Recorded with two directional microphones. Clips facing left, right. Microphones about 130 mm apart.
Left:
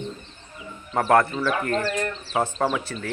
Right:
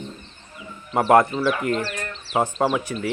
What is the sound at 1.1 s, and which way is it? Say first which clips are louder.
Speech: right 3 dB; 15° right (ahead or behind).